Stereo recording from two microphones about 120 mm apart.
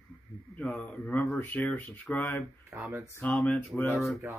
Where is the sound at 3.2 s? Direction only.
10° left (ahead or behind).